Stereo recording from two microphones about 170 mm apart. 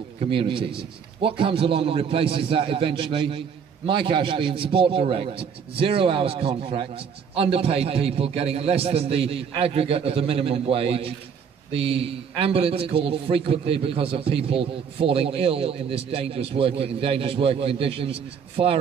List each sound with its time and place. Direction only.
0.2 s a man's voice: 30° right (ahead or behind)